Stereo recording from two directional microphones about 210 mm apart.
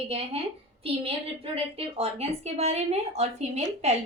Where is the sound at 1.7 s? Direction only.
30° right (ahead or behind).